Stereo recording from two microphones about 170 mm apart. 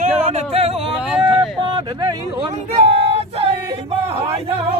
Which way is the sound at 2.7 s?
35° right (ahead or behind).